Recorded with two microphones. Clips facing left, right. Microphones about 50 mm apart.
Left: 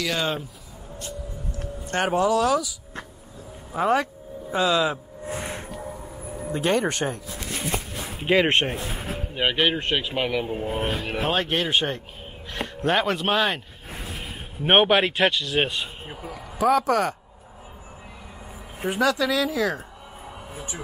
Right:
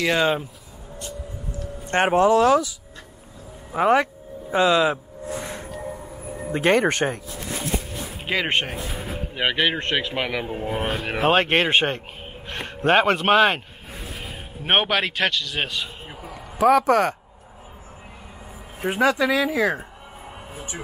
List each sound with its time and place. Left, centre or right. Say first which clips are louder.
0.2 s speech: right 6 dB; right
1.9 s speech: right 4 dB; right
3.7 s speech: right 3 dB; right
5.3 s a sound: right 1 dB; centre
5.9 s a sound: right 1 dB; centre
6.5 s speech: right 4 dB; right
8.3 s speech: left 4 dB; centre
10.6 s speech: right 1 dB; right
14.7 s speech: left 3 dB; centre
16.1 s a sound: left 1 dB; centre
16.8 s speech: right 3 dB; centre
18.9 s speech: right 2 dB; right